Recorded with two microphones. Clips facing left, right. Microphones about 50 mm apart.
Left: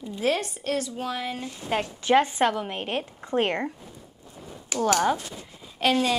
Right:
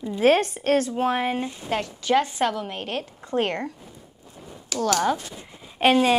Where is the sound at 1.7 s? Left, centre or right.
Centre.